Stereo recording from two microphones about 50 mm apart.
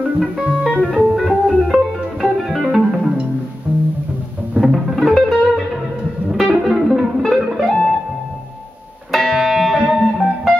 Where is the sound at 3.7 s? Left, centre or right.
Right.